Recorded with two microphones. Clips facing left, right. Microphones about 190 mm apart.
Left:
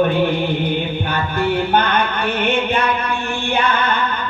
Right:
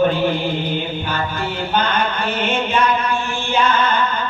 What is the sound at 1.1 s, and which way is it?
Music, 60° left (ahead or behind).